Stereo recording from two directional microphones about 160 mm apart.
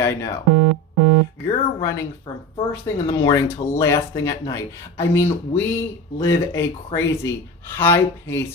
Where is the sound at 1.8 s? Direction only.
15° left (ahead or behind).